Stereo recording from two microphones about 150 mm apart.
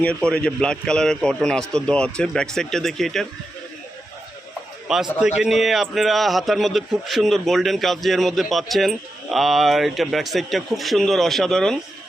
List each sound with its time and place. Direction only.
0.0 s a man's voice: 10° left (ahead or behind)
4.9 s a man's voice: 5° right (ahead or behind)